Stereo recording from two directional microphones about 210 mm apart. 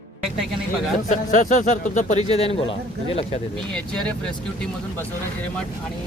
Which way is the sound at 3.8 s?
5° left (ahead or behind).